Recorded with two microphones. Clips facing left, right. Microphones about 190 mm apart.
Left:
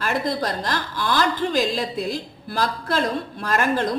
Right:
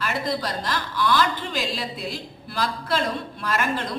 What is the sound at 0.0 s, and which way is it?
A woman's voice, 45° left (ahead or behind).